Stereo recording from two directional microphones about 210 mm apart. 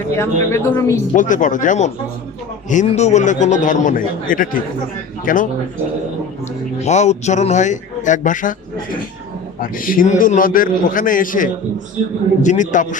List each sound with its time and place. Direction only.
0.2 s a woman's voice: 10° left (ahead or behind)
1.1 s a man's voice: 40° left (ahead or behind)
6.8 s a man's voice: 35° left (ahead or behind)
9.6 s a man's voice: 40° left (ahead or behind)